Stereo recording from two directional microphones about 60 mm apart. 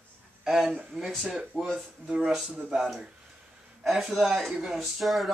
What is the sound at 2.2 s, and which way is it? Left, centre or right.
Speech, centre.